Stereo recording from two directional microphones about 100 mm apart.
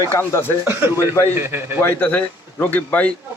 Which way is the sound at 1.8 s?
20° left (ahead or behind).